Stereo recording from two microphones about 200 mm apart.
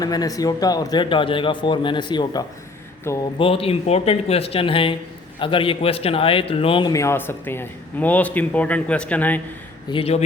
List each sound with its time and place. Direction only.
0.0 s a man's voice: 20° left (ahead or behind)
9.9 s speech: 30° left (ahead or behind)